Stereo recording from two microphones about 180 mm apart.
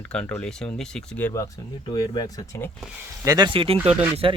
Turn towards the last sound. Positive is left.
turn(degrees=-30)  # may be behind; listen again after turning